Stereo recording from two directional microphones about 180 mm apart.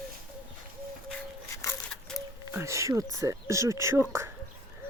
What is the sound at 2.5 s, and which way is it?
Speech, 15° right (ahead or behind).